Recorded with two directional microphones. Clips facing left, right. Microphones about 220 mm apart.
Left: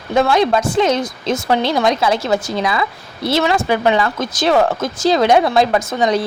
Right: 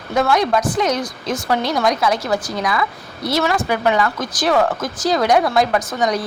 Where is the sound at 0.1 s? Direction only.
25° left (ahead or behind).